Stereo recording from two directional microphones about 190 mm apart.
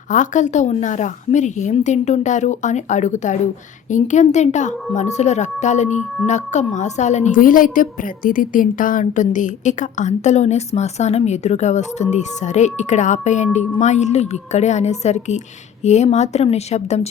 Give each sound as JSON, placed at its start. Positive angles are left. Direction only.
{"t": 0.1, "sound": "a woman's voice", "side_deg": 40}